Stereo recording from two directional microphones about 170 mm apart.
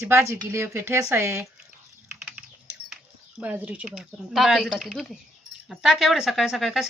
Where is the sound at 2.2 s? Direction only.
5° right (ahead or behind).